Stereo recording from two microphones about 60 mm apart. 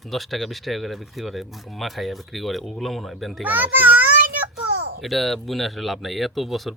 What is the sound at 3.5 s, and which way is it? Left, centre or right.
Speech, right.